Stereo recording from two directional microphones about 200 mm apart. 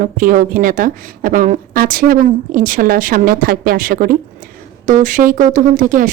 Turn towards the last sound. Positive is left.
turn(degrees=-40)  # may be behind; listen again after turning